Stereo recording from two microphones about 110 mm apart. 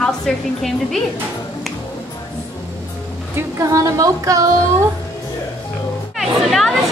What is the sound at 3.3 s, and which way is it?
Speech, 25° right (ahead or behind).